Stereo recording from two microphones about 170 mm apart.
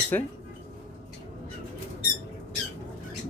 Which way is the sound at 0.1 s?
10° left (ahead or behind).